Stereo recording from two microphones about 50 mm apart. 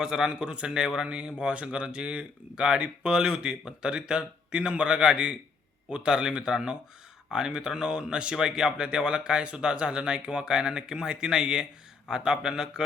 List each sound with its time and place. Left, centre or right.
0.0 s speech: centre